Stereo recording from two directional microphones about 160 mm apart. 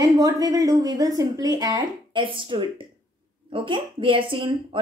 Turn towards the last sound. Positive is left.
turn(degrees=-35)  # may be behind; listen again after turning